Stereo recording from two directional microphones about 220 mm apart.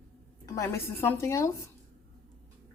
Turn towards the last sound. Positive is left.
turn(degrees=15)  # may be behind; listen again after turning